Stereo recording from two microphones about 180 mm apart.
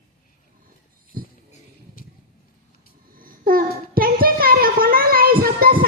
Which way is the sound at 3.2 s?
50° right (ahead or behind).